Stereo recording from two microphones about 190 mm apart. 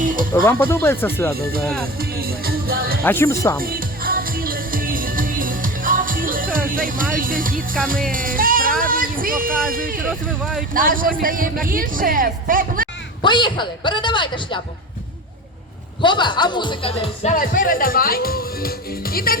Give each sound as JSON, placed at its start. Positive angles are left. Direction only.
{"t": 0.0, "sound": "music", "side_deg": -45}
{"t": 0.4, "sound": "speech", "side_deg": 10}
{"t": 2.0, "sound": "music", "side_deg": -50}
{"t": 3.0, "sound": "speech", "side_deg": 10}
{"t": 3.6, "sound": "music", "side_deg": -50}
{"t": 7.9, "sound": "speech", "side_deg": -45}
{"t": 10.1, "sound": "speech", "side_deg": 0}
{"t": 10.8, "sound": "speech", "side_deg": -45}
{"t": 13.2, "sound": "speech", "side_deg": 25}
{"t": 16.0, "sound": "speech", "side_deg": 25}
{"t": 17.3, "sound": "speech", "side_deg": 45}